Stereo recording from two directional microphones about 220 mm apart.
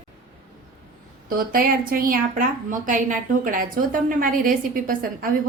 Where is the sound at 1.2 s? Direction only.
40° right (ahead or behind).